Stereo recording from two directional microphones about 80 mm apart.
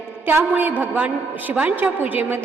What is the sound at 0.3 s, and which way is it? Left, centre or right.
A woman's voice, right.